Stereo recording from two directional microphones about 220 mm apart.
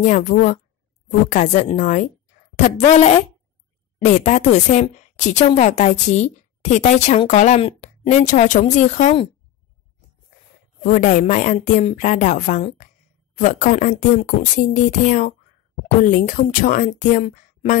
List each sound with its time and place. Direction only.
0.0 s a woman's voice: 35° left (ahead or behind)
10.8 s a woman's voice: 35° left (ahead or behind)